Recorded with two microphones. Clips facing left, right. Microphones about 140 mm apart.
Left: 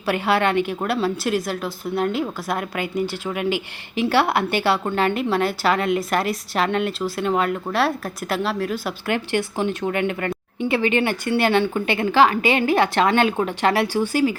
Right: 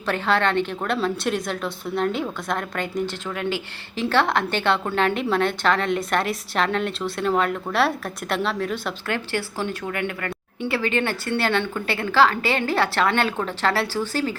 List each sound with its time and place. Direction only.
0.0 s a woman's voice: 10° left (ahead or behind)
9.0 s a woman's voice: 15° left (ahead or behind)